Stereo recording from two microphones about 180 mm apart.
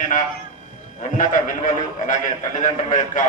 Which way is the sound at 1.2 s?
45° left (ahead or behind).